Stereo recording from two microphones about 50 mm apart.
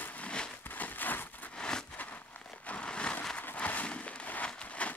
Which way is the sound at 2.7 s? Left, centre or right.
Left.